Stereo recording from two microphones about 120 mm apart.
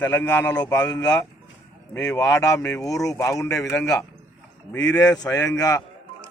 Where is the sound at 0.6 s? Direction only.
30° left (ahead or behind).